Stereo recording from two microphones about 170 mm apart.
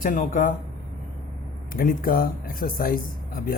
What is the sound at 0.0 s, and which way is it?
Speech, 50° left (ahead or behind).